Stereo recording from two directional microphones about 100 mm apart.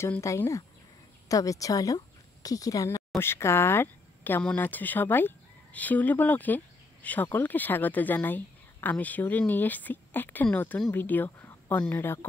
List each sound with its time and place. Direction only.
0.2 s a woman's voice: 30° left (ahead or behind)
3.2 s speech: 25° left (ahead or behind)